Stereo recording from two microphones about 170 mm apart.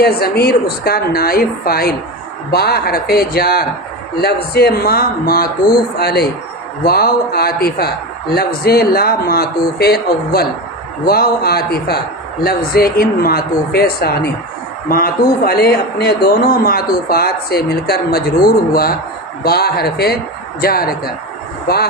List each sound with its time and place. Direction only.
0.0 s speech: 65° left (ahead or behind)
6.0 s speech: 70° left (ahead or behind)